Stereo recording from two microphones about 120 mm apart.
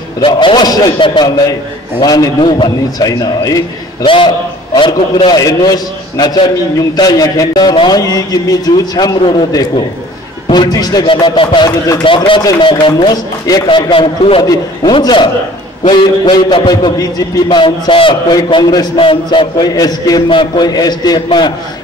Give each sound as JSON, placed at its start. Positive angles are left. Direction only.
{"t": 0.2, "sound": "a man's voice", "side_deg": 45}
{"t": 4.0, "sound": "a man's voice", "side_deg": 45}
{"t": 14.4, "sound": "a man's voice", "side_deg": 30}
{"t": 18.3, "sound": "a man's voice", "side_deg": 35}
{"t": 18.9, "sound": "a man's voice", "side_deg": 45}
{"t": 19.7, "sound": "a man's voice", "side_deg": 35}